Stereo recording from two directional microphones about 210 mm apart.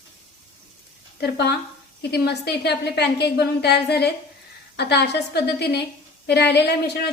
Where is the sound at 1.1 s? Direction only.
50° left (ahead or behind).